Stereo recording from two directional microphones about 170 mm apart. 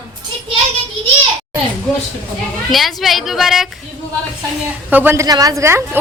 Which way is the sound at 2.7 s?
Centre (ahead or behind).